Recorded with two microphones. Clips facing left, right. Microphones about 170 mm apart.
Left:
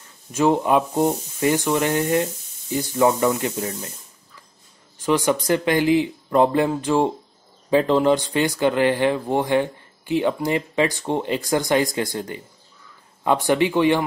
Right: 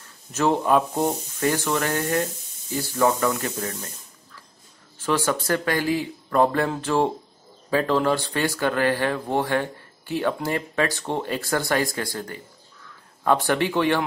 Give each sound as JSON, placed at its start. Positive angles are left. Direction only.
{"t": 0.3, "sound": "speech", "side_deg": 10}
{"t": 5.0, "sound": "speech", "side_deg": 15}